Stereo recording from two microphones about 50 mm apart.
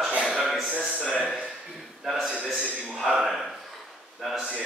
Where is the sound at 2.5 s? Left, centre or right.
Centre.